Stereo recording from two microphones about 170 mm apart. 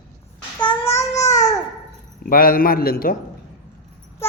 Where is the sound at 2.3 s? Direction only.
55° left (ahead or behind).